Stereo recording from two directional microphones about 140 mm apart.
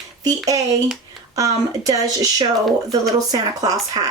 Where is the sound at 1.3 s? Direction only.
25° right (ahead or behind).